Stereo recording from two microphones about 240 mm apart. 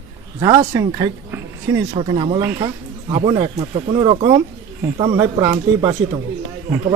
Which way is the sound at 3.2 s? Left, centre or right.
Right.